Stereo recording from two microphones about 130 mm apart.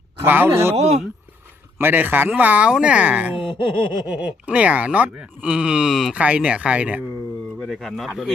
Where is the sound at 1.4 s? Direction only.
15° right (ahead or behind).